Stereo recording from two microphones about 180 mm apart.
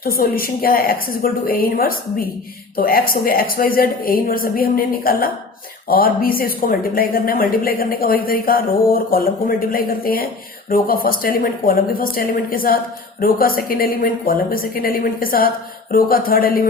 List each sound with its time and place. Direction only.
0.0 s a woman's voice: 55° left (ahead or behind)